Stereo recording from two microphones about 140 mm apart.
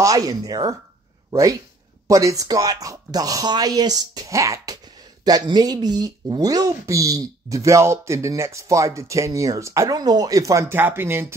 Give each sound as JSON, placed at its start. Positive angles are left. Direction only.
{"t": 0.0, "sound": "speech", "side_deg": -25}